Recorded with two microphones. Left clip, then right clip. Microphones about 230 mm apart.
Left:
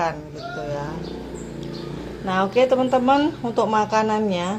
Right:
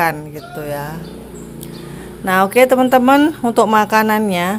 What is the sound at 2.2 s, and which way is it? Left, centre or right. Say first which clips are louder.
Speech: right 7 dB; right.